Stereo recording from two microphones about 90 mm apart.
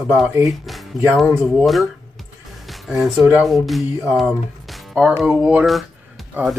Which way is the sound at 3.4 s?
Centre (ahead or behind).